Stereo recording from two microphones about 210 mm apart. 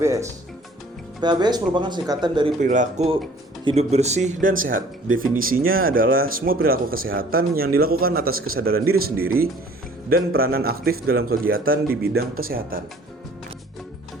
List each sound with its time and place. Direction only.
0.0 s speech: 15° right (ahead or behind)
2.6 s speech: 35° right (ahead or behind)